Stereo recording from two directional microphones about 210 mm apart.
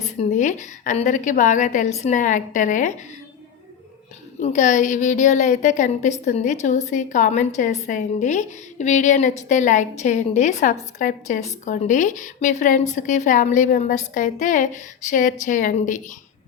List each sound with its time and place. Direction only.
0.0 s a woman's voice: 35° left (ahead or behind)
4.4 s a woman's voice: 35° left (ahead or behind)